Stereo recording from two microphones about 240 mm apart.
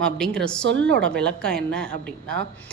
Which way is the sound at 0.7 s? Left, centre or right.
Right.